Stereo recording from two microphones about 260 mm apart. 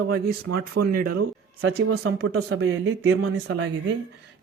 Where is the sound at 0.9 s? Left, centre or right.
Right.